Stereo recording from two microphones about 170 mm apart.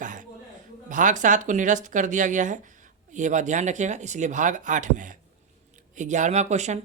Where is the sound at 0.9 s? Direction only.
50° right (ahead or behind).